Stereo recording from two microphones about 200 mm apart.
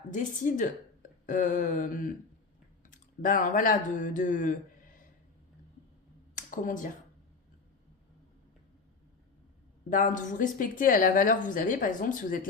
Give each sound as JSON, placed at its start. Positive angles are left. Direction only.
{"t": 0.1, "sound": "speech", "side_deg": 40}
{"t": 6.3, "sound": "a sound", "side_deg": 40}
{"t": 9.9, "sound": "speech", "side_deg": 40}